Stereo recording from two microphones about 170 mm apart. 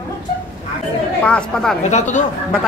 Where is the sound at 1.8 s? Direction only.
45° left (ahead or behind).